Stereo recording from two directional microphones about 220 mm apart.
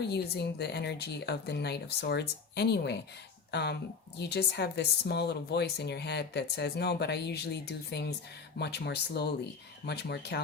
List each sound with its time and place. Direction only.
0.0 s speech: 50° left (ahead or behind)